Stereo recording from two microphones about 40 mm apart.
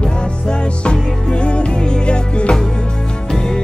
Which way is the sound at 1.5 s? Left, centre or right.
Left.